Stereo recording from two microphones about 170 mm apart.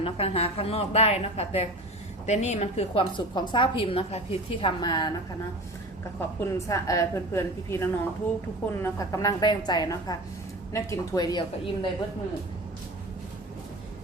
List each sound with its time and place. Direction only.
0.0 s a woman's voice: 35° left (ahead or behind)
6.1 s a woman's voice: 15° left (ahead or behind)